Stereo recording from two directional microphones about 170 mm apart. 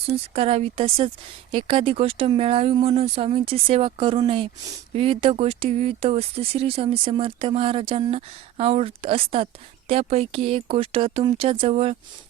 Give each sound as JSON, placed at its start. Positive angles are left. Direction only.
{"t": 0.3, "sound": "speech", "side_deg": -35}